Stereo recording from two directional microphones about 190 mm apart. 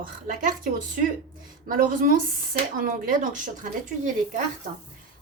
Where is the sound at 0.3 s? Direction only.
45° right (ahead or behind).